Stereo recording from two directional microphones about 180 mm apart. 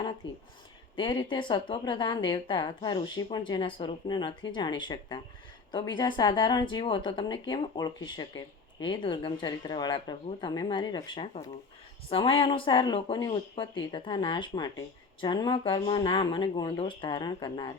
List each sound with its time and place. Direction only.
0.2 s speech: 25° left (ahead or behind)